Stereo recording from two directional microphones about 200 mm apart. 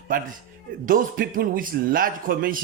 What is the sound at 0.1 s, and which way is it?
Speech, 45° right (ahead or behind).